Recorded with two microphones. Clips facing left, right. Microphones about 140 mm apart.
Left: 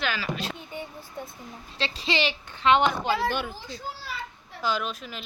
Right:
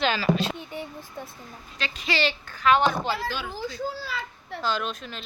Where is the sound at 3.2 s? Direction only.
55° left (ahead or behind).